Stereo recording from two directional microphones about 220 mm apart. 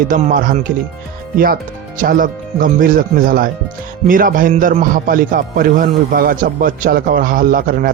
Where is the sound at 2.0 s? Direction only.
40° right (ahead or behind).